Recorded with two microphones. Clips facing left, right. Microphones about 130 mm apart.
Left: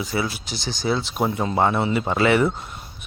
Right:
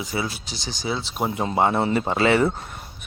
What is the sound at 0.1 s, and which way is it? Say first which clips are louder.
Speech: left 2 dB; 20° right (ahead or behind).